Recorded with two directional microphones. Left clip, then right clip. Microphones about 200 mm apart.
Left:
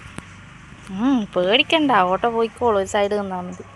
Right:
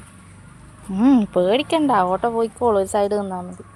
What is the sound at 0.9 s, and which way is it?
Speech, 35° right (ahead or behind).